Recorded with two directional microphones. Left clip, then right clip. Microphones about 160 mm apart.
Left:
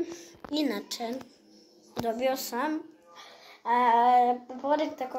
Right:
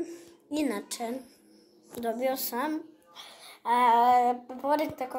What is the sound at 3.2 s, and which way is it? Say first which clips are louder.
A child's voice: right 1 dB; 20° right (ahead or behind).